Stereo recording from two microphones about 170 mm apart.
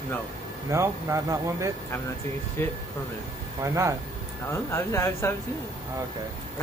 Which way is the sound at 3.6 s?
15° right (ahead or behind).